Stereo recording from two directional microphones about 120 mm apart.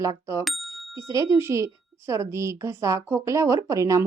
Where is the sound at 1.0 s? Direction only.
25° right (ahead or behind).